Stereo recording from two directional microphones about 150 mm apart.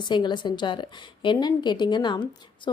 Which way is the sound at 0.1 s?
30° left (ahead or behind).